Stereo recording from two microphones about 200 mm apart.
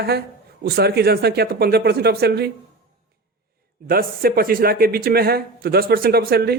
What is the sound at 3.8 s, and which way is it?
A man's voice, 50° right (ahead or behind).